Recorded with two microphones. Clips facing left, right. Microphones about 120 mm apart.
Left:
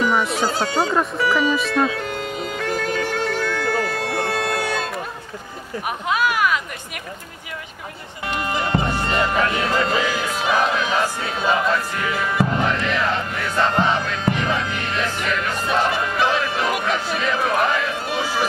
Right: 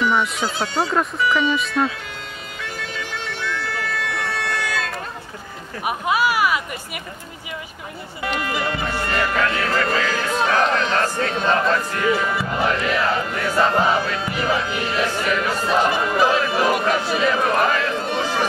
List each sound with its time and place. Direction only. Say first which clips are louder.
1.4 s music: left 1 dB; 40° left (ahead or behind)
5.9 s a sound: right 2 dB; 5° right (ahead or behind)
8.4 s speech: left 4 dB; 25° left (ahead or behind); by 15.0 s 5° right (ahead or behind)
15.2 s music: right 2 dB; 5° right (ahead or behind)